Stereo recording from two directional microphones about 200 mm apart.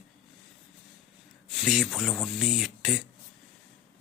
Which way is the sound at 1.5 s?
Centre (ahead or behind).